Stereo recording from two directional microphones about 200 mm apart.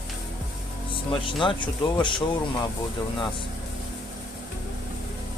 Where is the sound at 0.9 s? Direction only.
25° left (ahead or behind).